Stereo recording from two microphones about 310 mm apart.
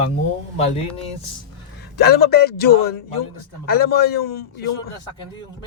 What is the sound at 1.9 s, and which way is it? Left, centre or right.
A man's voice, left.